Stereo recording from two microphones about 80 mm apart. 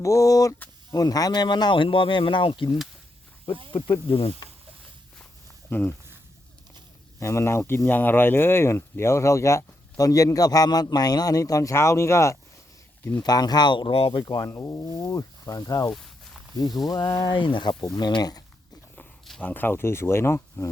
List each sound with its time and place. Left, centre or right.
0.0 s a man's voice: left
5.7 s speech: left
7.2 s speech: left
13.2 s speech: left
14.4 s speech: left
17.2 s a man's voice: left
17.8 s speech: left
19.4 s speech: left